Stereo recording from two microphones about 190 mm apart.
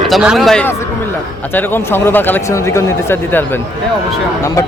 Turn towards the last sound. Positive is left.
turn(degrees=15)  # may be behind; listen again after turning